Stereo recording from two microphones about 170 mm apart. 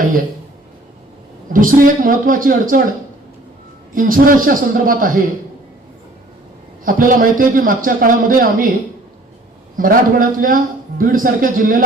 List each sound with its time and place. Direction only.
1.5 s a man's voice: 55° right (ahead or behind)
3.9 s a man's voice: 55° right (ahead or behind)
6.8 s a man's voice: 55° right (ahead or behind)
9.7 s a man's voice: 55° right (ahead or behind)